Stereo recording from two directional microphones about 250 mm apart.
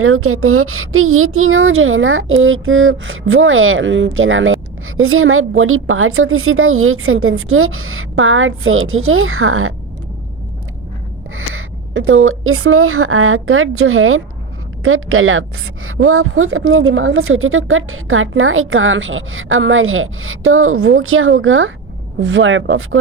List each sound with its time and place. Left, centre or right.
0.0 s speech: right
11.3 s a woman's voice: right